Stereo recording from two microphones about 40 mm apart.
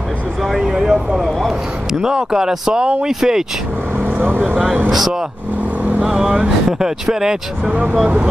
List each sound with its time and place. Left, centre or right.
0.4 s speech: centre
0.7 s speech: centre
4.0 s speech: right
4.9 s speech: centre
6.0 s speech: centre
7.7 s speech: right